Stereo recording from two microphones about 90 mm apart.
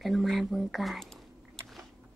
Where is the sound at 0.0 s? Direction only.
Centre (ahead or behind).